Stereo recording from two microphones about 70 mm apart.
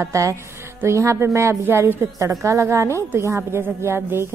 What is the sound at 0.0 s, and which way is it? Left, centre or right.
A woman's voice, right.